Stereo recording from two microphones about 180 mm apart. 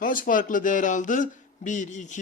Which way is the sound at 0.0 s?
50° left (ahead or behind).